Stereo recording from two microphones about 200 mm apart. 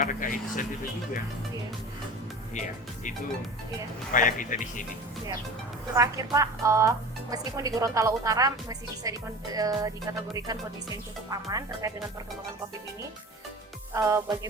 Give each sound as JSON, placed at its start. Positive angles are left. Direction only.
{"t": 0.0, "sound": "speech", "side_deg": 40}
{"t": 2.6, "sound": "speech", "side_deg": 40}
{"t": 5.9, "sound": "speech", "side_deg": -15}
{"t": 13.9, "sound": "speech", "side_deg": -15}